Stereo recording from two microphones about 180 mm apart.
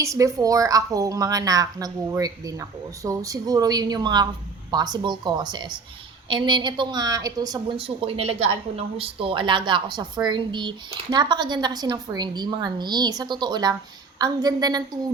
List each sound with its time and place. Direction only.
0.0 s a woman's voice: 15° right (ahead or behind)